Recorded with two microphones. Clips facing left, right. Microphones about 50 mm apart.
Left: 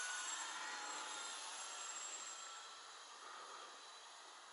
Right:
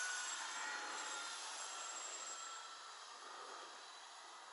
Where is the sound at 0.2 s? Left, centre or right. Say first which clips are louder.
Right 1 dB; left.